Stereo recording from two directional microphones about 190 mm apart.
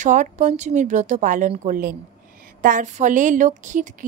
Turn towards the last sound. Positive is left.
turn(degrees=-40)  # may be behind; listen again after turning